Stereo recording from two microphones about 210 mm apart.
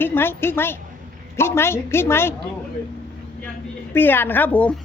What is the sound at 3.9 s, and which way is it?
Speech, 10° left (ahead or behind).